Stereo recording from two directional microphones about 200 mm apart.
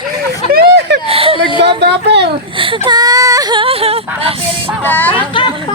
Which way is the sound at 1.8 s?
60° right (ahead or behind).